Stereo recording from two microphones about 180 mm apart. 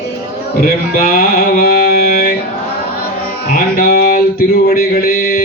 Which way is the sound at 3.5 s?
50° left (ahead or behind).